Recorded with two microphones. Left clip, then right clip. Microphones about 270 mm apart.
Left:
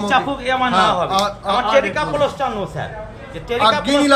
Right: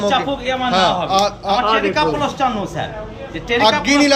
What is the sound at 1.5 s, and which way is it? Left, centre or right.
A man's voice, left.